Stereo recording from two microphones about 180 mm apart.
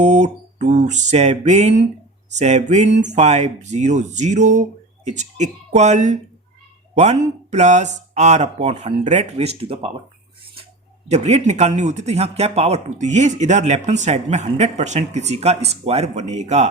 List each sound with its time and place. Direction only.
0.0 s speech: 40° right (ahead or behind)
10.4 s a sound: 30° right (ahead or behind)
11.1 s speech: 35° right (ahead or behind)